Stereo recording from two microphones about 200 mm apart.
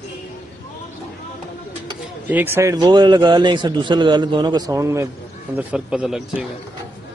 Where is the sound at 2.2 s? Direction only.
10° right (ahead or behind).